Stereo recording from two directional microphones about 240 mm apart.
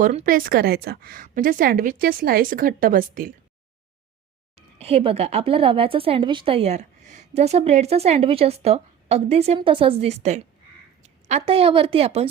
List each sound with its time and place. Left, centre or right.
0.0 s a woman's voice: right
4.5 s a woman's voice: right